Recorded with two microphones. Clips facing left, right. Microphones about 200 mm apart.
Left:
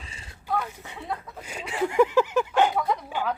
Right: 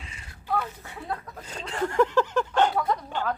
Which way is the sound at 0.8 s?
20° left (ahead or behind).